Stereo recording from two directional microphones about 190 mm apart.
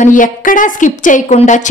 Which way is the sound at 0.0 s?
45° left (ahead or behind).